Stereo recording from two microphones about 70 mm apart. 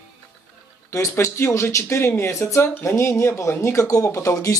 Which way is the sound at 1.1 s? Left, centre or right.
Left.